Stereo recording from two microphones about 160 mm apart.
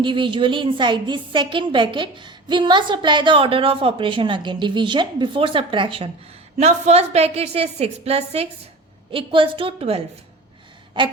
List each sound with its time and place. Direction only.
0.0 s a woman's voice: 30° right (ahead or behind)
6.6 s a woman's voice: 45° right (ahead or behind); by 11.1 s 30° right (ahead or behind)